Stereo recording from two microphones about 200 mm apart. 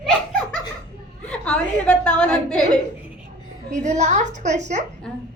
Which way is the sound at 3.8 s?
35° right (ahead or behind).